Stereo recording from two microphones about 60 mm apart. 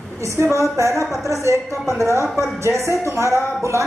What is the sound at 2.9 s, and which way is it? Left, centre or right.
Speech, right.